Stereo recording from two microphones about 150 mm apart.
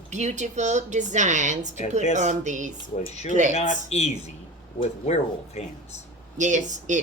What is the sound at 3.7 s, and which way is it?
Speech, 50° left (ahead or behind).